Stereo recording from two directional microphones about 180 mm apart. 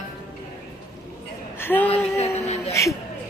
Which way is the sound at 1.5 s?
10° left (ahead or behind).